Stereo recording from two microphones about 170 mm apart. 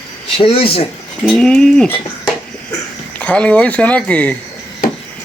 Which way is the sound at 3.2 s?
5° left (ahead or behind).